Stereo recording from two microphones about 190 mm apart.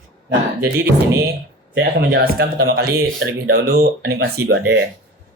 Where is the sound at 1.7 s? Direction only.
55° right (ahead or behind).